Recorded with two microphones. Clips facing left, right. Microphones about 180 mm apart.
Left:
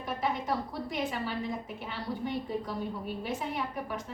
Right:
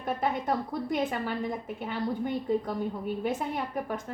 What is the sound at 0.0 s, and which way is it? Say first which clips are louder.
A woman's voice: right 3 dB; 50° right (ahead or behind).